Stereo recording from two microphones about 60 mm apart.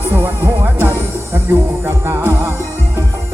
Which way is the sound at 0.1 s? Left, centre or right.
Right.